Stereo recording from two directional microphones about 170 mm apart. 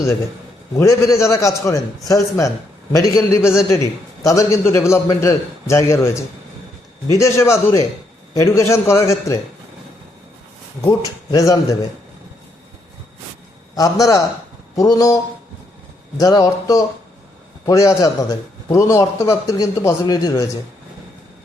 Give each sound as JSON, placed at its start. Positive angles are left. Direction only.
{"t": 0.8, "sound": "a man's voice", "side_deg": 20}
{"t": 10.8, "sound": "a man's voice", "side_deg": 25}
{"t": 13.7, "sound": "a man's voice", "side_deg": 20}